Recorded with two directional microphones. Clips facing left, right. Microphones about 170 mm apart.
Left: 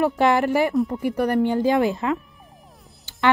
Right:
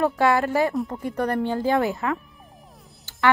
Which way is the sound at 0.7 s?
Centre (ahead or behind).